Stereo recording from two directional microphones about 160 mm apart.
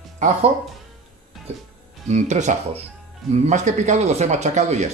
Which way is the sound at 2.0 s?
45° right (ahead or behind).